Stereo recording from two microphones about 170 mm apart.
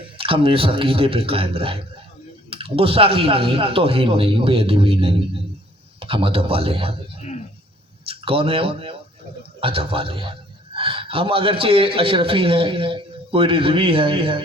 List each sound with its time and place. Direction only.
0.0 s a man's voice: 30° right (ahead or behind)
8.0 s a man's voice: 35° right (ahead or behind)